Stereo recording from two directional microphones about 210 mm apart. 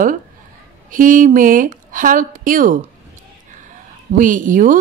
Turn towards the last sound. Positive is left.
turn(degrees=-40)  # may be behind; listen again after turning